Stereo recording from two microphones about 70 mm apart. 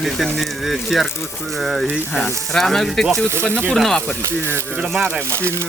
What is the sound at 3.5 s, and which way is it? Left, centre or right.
Speech, right.